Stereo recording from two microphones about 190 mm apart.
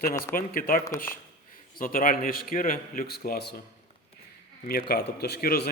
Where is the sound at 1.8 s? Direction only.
45° left (ahead or behind).